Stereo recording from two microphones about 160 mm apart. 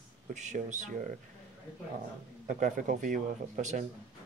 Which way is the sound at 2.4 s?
55° right (ahead or behind).